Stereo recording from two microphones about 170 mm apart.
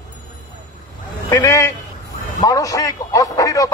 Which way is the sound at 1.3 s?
20° left (ahead or behind).